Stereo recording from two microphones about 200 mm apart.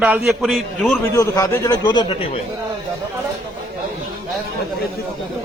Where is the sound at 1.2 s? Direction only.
15° left (ahead or behind).